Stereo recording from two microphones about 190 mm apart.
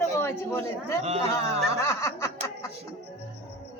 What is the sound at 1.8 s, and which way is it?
Snicker, 15° left (ahead or behind).